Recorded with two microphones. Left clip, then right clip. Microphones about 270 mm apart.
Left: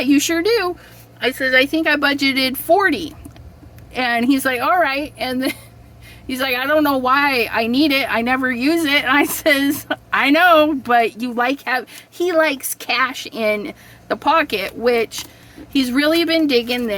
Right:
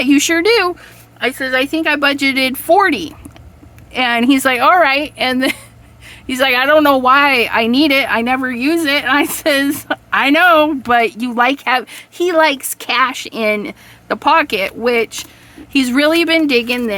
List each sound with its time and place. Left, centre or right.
0.0 s a woman's voice: centre